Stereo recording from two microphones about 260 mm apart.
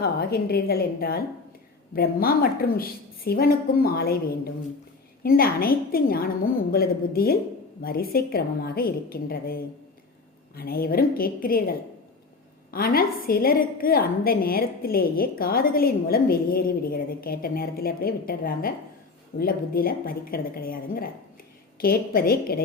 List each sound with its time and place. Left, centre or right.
0.0 s a woman's voice: left
12.7 s a woman's voice: left